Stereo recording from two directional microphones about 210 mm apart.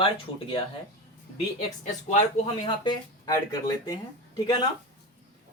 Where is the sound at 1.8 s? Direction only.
35° left (ahead or behind).